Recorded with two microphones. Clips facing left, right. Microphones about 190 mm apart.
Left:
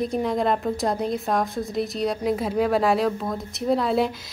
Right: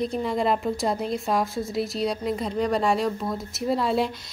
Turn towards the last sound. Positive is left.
turn(degrees=0)  # may be behind; listen again after turning